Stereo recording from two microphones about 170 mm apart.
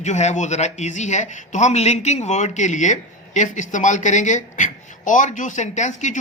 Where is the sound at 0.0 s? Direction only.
40° left (ahead or behind).